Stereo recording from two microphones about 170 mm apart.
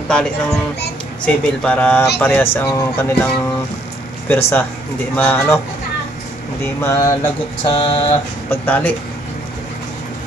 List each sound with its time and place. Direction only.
0.1 s child singing: 5° left (ahead or behind)
1.2 s speech: 5° left (ahead or behind)
4.3 s speech: 15° left (ahead or behind)
6.6 s speech: 15° left (ahead or behind)
7.6 s mantra: 30° left (ahead or behind)
8.5 s speech: 10° left (ahead or behind)